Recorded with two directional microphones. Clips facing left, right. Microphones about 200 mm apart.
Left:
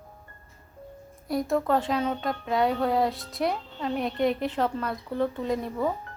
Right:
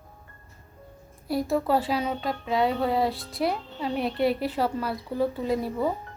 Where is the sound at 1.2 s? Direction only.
5° right (ahead or behind).